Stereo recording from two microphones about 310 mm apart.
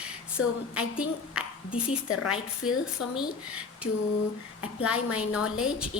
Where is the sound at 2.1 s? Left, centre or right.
Left.